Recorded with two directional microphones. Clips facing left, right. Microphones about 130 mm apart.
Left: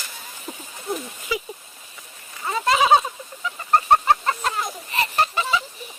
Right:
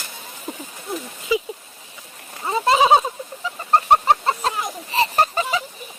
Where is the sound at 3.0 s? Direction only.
30° right (ahead or behind).